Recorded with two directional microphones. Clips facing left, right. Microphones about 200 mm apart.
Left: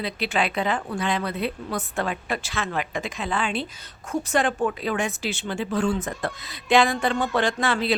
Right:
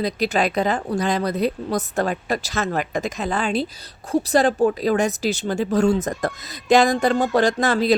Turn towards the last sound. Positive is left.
turn(degrees=-40)  # may be behind; listen again after turning